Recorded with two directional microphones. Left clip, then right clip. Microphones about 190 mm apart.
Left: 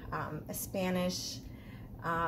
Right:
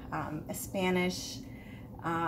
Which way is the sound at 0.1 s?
50° left (ahead or behind).